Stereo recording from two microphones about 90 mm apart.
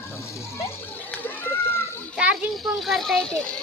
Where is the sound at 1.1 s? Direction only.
20° left (ahead or behind).